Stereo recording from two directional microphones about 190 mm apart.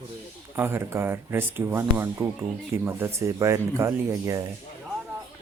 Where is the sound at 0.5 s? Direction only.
10° right (ahead or behind).